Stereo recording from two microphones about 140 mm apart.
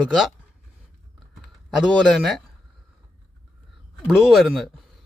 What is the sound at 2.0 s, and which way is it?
Speech, 5° left (ahead or behind).